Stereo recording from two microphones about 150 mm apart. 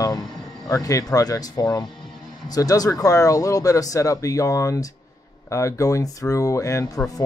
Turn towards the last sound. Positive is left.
turn(degrees=20)  # may be behind; listen again after turning